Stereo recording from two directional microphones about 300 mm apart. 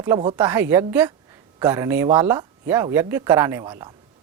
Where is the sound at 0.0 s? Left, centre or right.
Centre.